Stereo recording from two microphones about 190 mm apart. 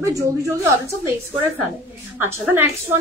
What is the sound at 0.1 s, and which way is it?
A woman's voice, 15° right (ahead or behind).